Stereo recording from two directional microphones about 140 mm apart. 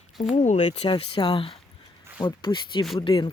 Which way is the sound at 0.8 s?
35° left (ahead or behind).